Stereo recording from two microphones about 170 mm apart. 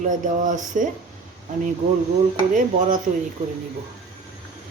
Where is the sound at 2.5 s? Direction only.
50° right (ahead or behind).